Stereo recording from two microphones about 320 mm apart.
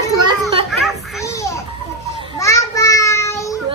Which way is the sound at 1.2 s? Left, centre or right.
Centre.